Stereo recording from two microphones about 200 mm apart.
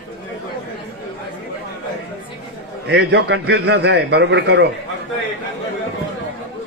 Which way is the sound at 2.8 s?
60° right (ahead or behind).